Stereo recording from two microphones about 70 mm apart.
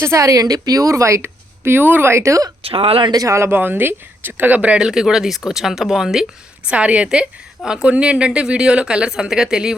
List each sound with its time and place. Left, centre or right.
0.0 s speech: right
3.5 s speech: right
4.9 s speech: centre
6.7 s a woman's voice: centre